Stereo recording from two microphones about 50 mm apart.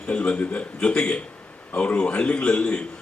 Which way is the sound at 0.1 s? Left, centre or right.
Left.